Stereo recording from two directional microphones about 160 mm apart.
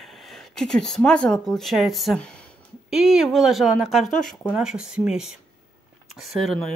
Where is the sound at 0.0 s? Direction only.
Centre (ahead or behind).